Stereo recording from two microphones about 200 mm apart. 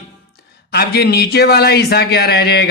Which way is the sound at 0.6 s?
55° left (ahead or behind).